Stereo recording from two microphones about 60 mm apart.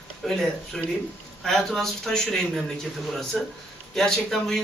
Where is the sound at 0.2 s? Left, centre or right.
Centre.